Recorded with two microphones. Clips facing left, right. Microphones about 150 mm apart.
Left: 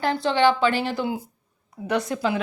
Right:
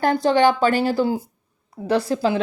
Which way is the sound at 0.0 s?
45° right (ahead or behind).